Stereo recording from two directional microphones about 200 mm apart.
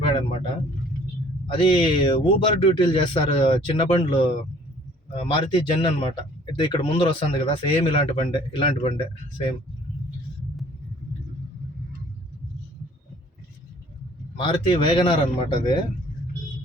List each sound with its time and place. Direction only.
0.0 s a sound: 25° left (ahead or behind)
1.5 s speech: 25° left (ahead or behind)
14.3 s speech: 25° left (ahead or behind)